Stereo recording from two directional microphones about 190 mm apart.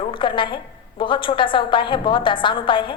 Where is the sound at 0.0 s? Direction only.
25° left (ahead or behind).